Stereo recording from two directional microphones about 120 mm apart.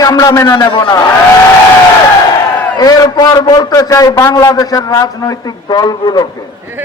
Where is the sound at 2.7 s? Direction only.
30° left (ahead or behind).